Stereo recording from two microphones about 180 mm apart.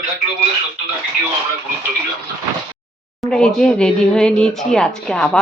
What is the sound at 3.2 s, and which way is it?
Speech, 5° left (ahead or behind).